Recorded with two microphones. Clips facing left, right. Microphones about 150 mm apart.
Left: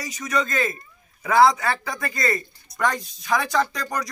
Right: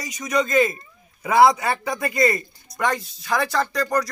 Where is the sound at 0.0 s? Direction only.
10° right (ahead or behind).